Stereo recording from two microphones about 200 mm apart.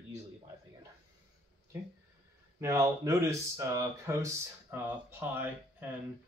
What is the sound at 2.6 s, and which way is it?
Speech, 15° right (ahead or behind).